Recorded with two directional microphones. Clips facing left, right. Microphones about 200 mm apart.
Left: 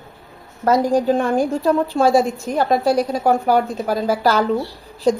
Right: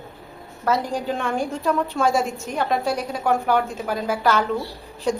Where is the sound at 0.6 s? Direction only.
40° left (ahead or behind).